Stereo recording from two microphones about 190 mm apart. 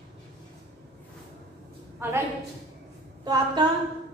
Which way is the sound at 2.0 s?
10° right (ahead or behind).